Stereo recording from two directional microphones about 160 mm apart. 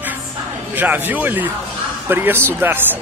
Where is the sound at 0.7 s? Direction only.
10° right (ahead or behind).